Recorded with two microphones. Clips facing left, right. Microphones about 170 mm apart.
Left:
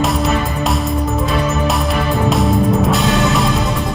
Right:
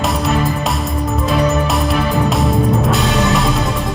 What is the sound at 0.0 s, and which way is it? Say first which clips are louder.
Music: even; centre (ahead or behind).